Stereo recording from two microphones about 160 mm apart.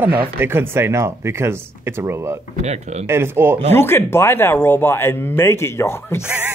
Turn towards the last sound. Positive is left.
turn(degrees=-10)  # may be behind; listen again after turning